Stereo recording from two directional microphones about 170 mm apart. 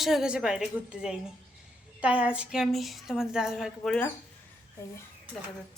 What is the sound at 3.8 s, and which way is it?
Speech, 10° left (ahead or behind).